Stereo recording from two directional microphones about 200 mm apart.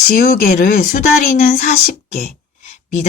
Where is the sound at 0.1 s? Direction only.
50° left (ahead or behind).